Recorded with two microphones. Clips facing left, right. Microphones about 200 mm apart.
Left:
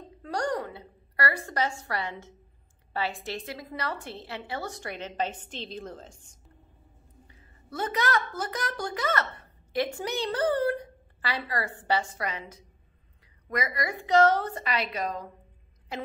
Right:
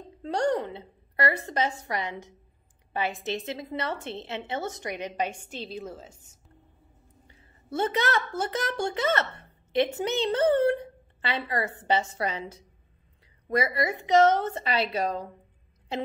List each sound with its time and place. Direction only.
0.2 s a woman's voice: 25° right (ahead or behind); by 6.3 s 5° right (ahead or behind)
7.2 s a woman's voice: 25° right (ahead or behind)